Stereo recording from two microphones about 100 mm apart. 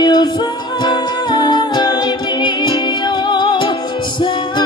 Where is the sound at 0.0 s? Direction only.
45° left (ahead or behind).